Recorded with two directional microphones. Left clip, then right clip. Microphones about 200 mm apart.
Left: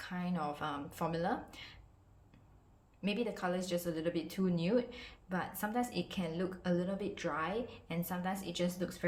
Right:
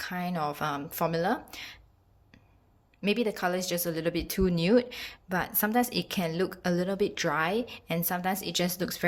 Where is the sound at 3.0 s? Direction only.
35° right (ahead or behind).